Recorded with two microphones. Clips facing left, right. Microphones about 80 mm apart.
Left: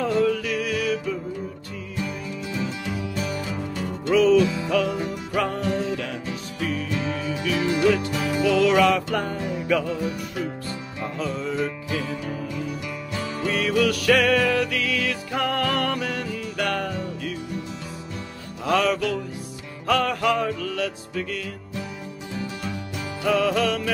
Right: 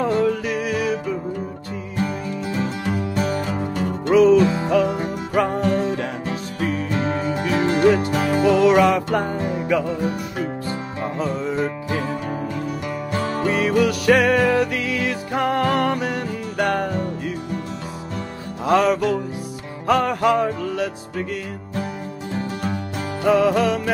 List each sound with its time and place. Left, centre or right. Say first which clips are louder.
0.0 s music: right 2 dB; right
2.0 s music: right 6 dB; right
4.1 s music: right 4 dB; centre
4.4 s music: right 4 dB; right
8.5 s music: right 2 dB; right
9.4 s music: right 4 dB; right
9.7 s music: right 1 dB; centre
9.9 s music: right 4 dB; right
11.5 s music: right 3 dB; right
12.0 s music: right 4 dB; right
13.5 s music: right 2 dB; right
18.7 s music: right 4 dB; right
22.3 s music: right 5 dB; right
23.2 s music: right 5 dB; right